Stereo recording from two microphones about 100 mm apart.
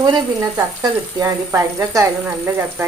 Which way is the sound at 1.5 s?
30° right (ahead or behind).